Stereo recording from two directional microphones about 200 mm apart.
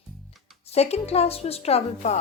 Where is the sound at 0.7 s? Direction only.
30° left (ahead or behind).